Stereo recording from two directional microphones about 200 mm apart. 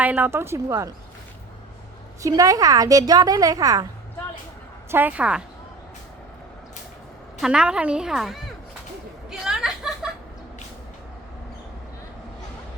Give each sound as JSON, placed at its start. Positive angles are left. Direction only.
{"t": 0.0, "sound": "a woman's voice", "side_deg": -10}
{"t": 2.2, "sound": "a woman's voice", "side_deg": -15}
{"t": 4.9, "sound": "a woman's voice", "side_deg": -10}
{"t": 7.4, "sound": "a woman's voice", "side_deg": -5}
{"t": 9.3, "sound": "chuckle", "side_deg": 0}